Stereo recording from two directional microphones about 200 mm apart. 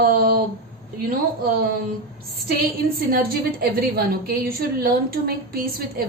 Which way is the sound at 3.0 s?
50° right (ahead or behind).